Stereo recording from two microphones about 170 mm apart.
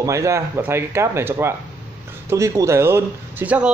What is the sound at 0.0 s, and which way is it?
A man's voice, 20° right (ahead or behind).